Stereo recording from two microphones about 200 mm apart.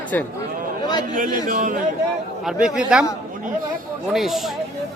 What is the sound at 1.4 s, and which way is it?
Speech, 40° right (ahead or behind).